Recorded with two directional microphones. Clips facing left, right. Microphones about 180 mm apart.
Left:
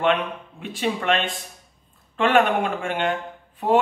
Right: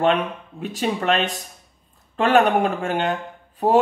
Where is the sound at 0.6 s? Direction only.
40° right (ahead or behind).